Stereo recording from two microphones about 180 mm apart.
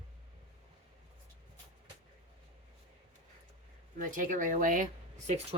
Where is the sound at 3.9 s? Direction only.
50° right (ahead or behind).